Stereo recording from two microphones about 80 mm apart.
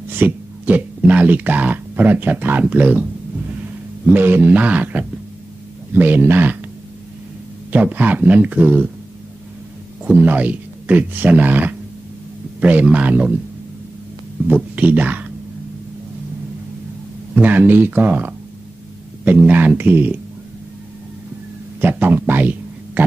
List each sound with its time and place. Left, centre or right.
0.2 s speech: right
7.7 s speech: right
10.0 s speech: centre
14.5 s speech: centre
17.4 s speech: right
21.8 s a man's voice: right